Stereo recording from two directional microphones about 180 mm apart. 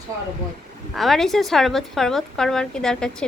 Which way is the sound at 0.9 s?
Centre (ahead or behind).